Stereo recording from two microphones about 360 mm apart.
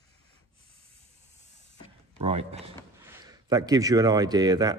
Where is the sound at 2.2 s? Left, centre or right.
Centre.